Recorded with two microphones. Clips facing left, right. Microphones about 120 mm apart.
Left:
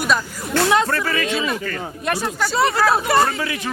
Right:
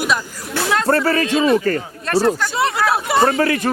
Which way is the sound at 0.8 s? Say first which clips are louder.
Right 6 dB; 35° right (ahead or behind).